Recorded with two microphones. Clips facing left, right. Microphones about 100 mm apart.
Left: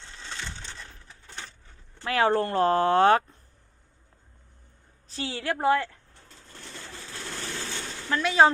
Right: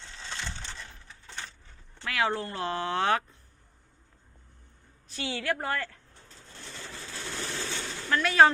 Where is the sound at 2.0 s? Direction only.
35° left (ahead or behind).